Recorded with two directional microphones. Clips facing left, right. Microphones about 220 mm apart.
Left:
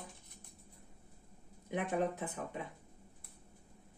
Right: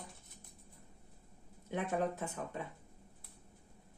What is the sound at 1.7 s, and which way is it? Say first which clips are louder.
Speech: left 1 dB; 15° left (ahead or behind).